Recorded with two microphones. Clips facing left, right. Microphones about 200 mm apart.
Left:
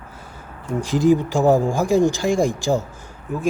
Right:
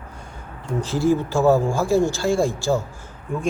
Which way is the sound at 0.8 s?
15° left (ahead or behind).